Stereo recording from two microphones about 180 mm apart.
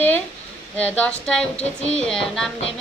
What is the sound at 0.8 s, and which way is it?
A woman's voice, 5° left (ahead or behind).